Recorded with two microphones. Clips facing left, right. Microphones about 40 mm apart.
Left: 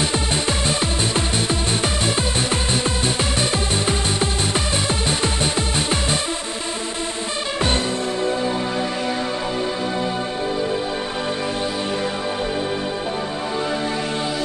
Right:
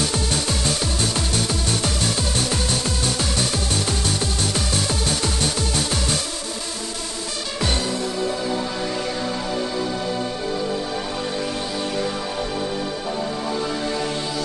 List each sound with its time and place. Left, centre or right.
0.0 s music: left